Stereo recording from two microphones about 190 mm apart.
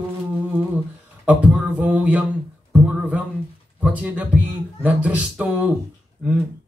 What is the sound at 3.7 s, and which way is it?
A man's voice, 10° right (ahead or behind).